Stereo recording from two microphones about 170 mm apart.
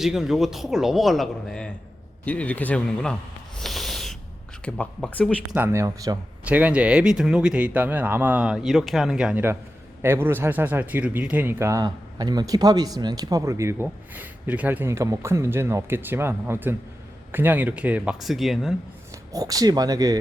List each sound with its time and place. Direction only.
0.0 s a man's voice: centre (ahead or behind)
3.6 s a sound: centre (ahead or behind)
4.6 s a man's voice: 5° left (ahead or behind)
5.5 s a man's voice: 10° right (ahead or behind)
19.3 s speech: 20° right (ahead or behind)